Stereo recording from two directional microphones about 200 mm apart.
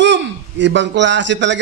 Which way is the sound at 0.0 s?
65° right (ahead or behind).